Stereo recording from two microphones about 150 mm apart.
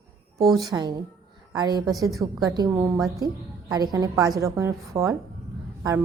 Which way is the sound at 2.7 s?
15° right (ahead or behind).